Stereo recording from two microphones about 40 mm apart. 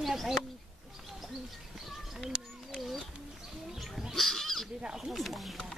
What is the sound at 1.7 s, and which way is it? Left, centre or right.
Bird, centre.